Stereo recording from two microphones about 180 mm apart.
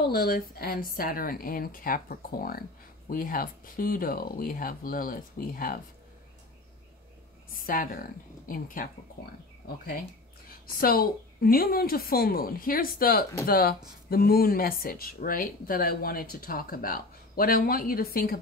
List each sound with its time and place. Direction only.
0.1 s speech: 55° left (ahead or behind)
7.5 s speech: 50° left (ahead or behind)
10.8 s speech: 55° left (ahead or behind)